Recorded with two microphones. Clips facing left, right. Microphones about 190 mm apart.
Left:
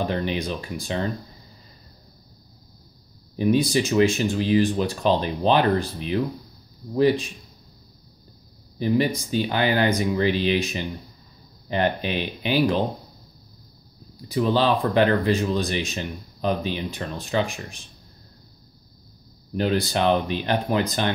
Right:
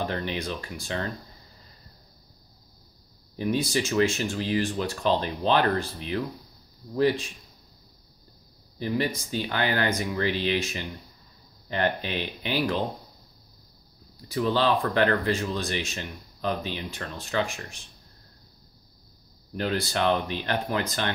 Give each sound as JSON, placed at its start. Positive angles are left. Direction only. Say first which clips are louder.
{"t": 0.0, "sound": "speech", "louder": "left 4 dB", "side_deg": 15}
{"t": 3.3, "sound": "speech", "louder": "left 6 dB", "side_deg": 15}
{"t": 8.7, "sound": "speech", "louder": "left 6 dB", "side_deg": 15}
{"t": 14.2, "sound": "speech", "louder": "left 3 dB", "side_deg": 15}
{"t": 19.5, "sound": "speech", "louder": "left 5 dB", "side_deg": 15}